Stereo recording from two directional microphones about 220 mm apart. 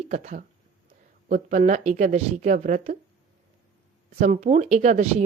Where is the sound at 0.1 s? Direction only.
35° right (ahead or behind).